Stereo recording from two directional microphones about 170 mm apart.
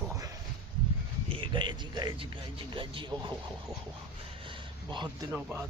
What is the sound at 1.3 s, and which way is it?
Speech, 30° right (ahead or behind).